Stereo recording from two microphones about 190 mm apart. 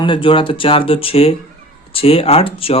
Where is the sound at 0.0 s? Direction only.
25° left (ahead or behind).